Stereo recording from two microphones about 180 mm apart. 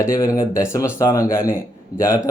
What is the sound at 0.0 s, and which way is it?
Speech, 20° left (ahead or behind).